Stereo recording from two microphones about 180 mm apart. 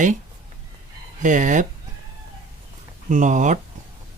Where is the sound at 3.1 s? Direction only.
45° right (ahead or behind).